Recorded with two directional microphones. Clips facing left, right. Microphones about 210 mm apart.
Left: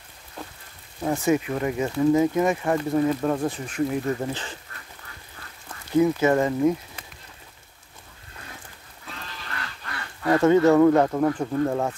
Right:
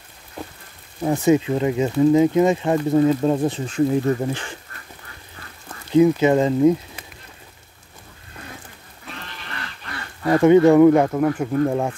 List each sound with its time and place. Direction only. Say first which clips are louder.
1.0 s speech: right 5 dB; 20° right (ahead or behind)
4.2 s speech: right 4 dB; 15° right (ahead or behind)
5.9 s speech: right 4 dB; 20° right (ahead or behind)
10.2 s speech: right 4 dB; 15° right (ahead or behind)